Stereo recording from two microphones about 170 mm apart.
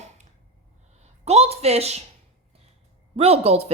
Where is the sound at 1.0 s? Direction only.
40° right (ahead or behind).